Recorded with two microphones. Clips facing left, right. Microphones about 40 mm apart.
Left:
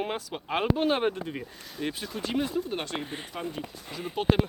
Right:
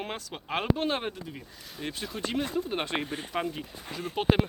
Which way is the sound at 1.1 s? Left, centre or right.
Left.